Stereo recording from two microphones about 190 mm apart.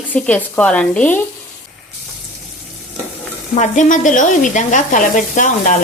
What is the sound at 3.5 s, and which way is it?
Sizzle, 40° left (ahead or behind).